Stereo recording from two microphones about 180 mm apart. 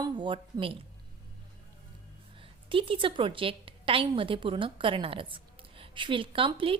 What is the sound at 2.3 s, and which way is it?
A woman's voice, 30° right (ahead or behind).